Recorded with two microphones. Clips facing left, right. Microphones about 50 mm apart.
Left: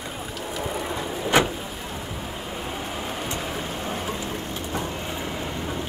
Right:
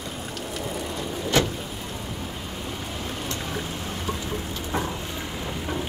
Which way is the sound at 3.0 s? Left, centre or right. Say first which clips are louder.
Left 1 dB; centre.